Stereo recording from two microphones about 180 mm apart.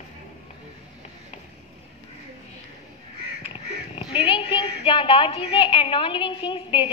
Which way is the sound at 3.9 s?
30° left (ahead or behind).